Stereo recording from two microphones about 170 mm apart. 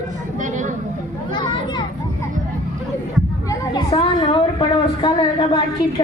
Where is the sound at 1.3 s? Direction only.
25° left (ahead or behind).